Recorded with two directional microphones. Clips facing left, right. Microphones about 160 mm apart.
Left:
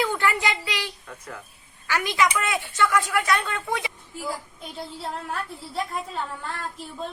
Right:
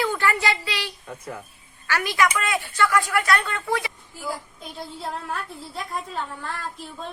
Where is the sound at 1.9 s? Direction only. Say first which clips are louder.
Right 1 dB; 15° left (ahead or behind).